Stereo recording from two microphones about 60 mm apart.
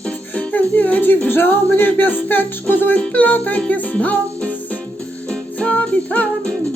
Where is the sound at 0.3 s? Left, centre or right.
Left.